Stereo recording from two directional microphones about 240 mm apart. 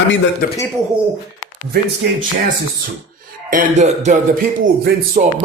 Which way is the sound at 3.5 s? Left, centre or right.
Right.